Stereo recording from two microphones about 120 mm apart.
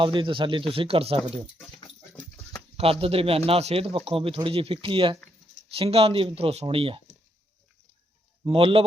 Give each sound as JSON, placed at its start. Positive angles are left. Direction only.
{"t": 0.0, "sound": "speech", "side_deg": -45}
{"t": 2.7, "sound": "speech", "side_deg": -55}
{"t": 8.4, "sound": "speech", "side_deg": -50}